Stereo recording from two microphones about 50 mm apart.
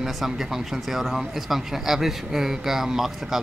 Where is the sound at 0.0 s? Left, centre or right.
Centre.